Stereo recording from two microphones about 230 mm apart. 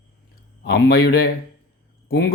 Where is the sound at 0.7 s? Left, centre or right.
Left.